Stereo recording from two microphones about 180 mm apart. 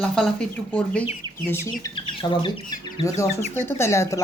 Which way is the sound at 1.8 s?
30° left (ahead or behind).